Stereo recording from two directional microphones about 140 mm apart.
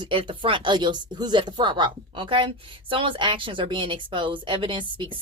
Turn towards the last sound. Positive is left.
turn(degrees=-35)  # may be behind; listen again after turning